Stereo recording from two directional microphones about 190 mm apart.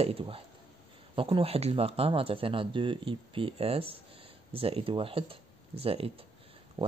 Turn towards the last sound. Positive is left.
turn(degrees=-30)  # may be behind; listen again after turning